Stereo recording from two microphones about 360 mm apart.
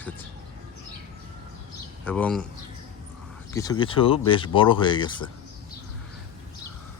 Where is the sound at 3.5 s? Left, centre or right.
Centre.